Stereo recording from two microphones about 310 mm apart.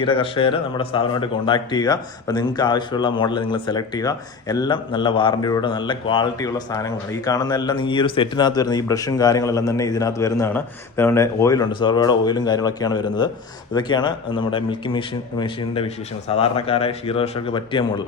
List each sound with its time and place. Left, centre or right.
0.0 s speech: centre